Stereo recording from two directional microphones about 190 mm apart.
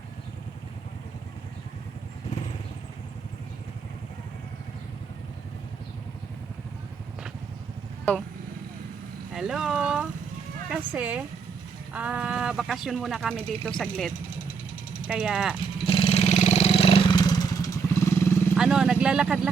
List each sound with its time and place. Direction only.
9.3 s a sound: centre (ahead or behind)
10.7 s music: 5° right (ahead or behind)
11.9 s speech: 5° right (ahead or behind)
15.9 s vehicle: 30° left (ahead or behind)
18.5 s speech: 5° right (ahead or behind)